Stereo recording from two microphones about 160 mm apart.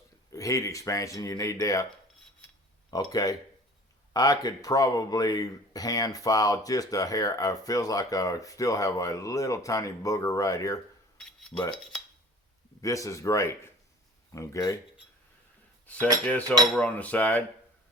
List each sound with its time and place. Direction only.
0.3 s speech: 20° left (ahead or behind)
2.9 s speech: 25° left (ahead or behind)
11.2 s cutlery: 5° left (ahead or behind)
12.8 s speech: 20° left (ahead or behind)
16.2 s cutlery: 10° left (ahead or behind)